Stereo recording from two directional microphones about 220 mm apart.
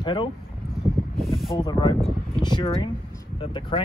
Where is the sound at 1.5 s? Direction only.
20° left (ahead or behind).